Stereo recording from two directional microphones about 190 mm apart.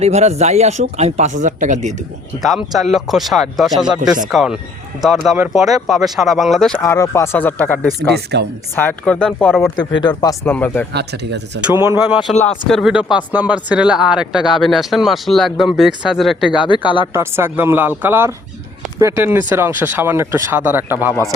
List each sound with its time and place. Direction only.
0.0 s speech: 35° right (ahead or behind)
2.4 s speech: centre (ahead or behind)
6.7 s speech: 15° left (ahead or behind)
7.9 s speech: 60° right (ahead or behind)
8.7 s speech: 10° left (ahead or behind)
10.2 s speech: 20° left (ahead or behind)
10.9 s speech: 60° right (ahead or behind)
11.6 s speech: 10° right (ahead or behind)
12.6 s speech: centre (ahead or behind)
16.6 s speech: 25° left (ahead or behind)
17.1 s speech: 15° right (ahead or behind)